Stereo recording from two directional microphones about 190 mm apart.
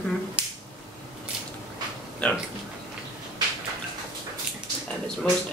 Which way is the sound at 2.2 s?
5° left (ahead or behind).